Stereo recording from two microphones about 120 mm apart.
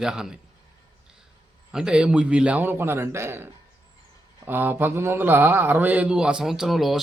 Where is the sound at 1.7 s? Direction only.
5° right (ahead or behind).